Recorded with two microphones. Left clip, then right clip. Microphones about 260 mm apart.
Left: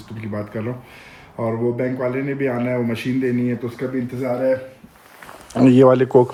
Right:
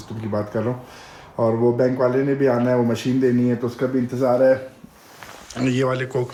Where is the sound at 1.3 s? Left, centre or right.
Centre.